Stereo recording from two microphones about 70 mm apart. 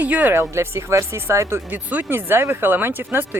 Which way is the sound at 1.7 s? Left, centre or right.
Right.